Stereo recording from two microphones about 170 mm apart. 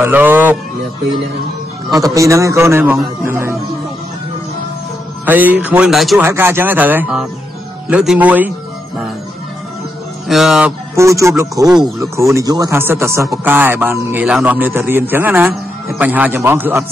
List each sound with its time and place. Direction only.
0.0 s a man's voice: 10° right (ahead or behind)
2.0 s a man's voice: 20° right (ahead or behind)
5.2 s a man's voice: 10° right (ahead or behind)
6.2 s a man's voice: 15° right (ahead or behind)
10.2 s speech: centre (ahead or behind)
11.0 s a man's voice: 15° right (ahead or behind)